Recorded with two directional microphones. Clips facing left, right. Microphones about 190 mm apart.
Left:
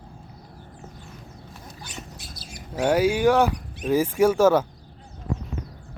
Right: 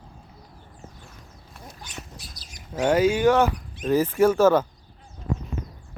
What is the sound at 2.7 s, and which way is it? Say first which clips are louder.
Speech: even; 10° left (ahead or behind).